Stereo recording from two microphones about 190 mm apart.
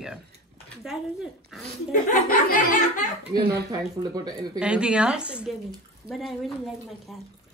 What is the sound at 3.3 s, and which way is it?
Speech, 55° right (ahead or behind).